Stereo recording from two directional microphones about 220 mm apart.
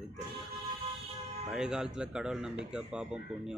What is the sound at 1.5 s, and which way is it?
Speech, 5° right (ahead or behind).